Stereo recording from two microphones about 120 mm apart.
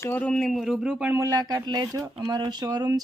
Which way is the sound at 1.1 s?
25° right (ahead or behind).